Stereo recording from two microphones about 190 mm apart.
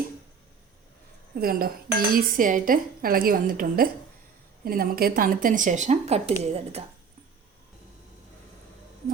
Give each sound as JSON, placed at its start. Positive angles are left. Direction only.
{"t": 1.4, "sound": "speech", "side_deg": -50}